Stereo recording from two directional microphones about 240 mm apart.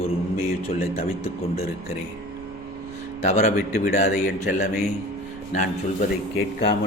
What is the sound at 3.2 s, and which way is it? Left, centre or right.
A man's voice, left.